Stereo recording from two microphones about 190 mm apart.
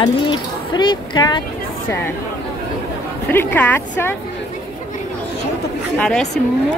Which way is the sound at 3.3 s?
10° left (ahead or behind).